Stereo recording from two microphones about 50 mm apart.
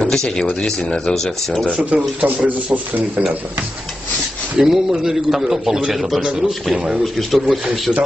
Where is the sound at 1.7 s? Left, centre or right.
Right.